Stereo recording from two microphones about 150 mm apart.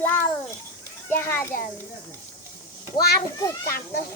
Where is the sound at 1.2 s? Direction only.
15° left (ahead or behind).